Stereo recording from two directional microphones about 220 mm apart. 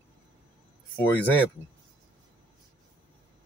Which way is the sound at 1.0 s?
10° left (ahead or behind).